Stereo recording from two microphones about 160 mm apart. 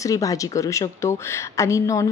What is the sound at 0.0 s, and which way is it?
A woman's voice, 20° left (ahead or behind).